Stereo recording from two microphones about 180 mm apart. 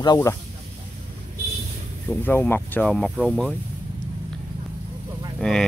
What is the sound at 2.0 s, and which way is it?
Speech, 10° left (ahead or behind).